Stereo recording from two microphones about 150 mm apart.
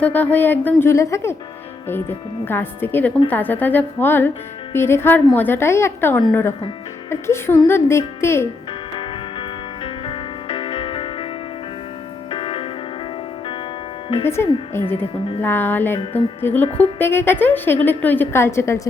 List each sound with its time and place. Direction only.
0.0 s a woman's voice: 10° left (ahead or behind)
9.0 s music: 35° left (ahead or behind)
12.3 s music: 40° left (ahead or behind)
14.3 s a woman's voice: 15° left (ahead or behind)
16.6 s speech: 45° left (ahead or behind)
17.0 s a woman's voice: 15° left (ahead or behind)